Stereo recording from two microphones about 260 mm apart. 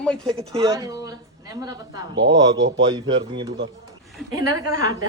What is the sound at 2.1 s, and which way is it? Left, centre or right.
Speech, right.